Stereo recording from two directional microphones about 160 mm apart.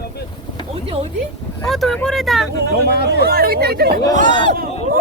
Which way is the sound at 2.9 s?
85° left.